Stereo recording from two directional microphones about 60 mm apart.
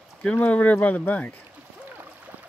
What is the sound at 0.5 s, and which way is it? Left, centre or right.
Speech, left.